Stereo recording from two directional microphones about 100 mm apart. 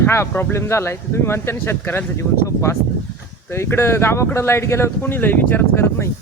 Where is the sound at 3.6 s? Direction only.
25° left (ahead or behind).